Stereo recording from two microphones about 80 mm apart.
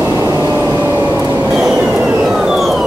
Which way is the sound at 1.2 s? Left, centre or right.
Right.